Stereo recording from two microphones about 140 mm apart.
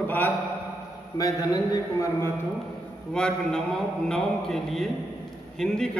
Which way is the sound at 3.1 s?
5° left (ahead or behind).